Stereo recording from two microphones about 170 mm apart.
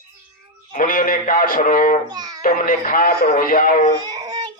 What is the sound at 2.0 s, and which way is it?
Music, 25° right (ahead or behind).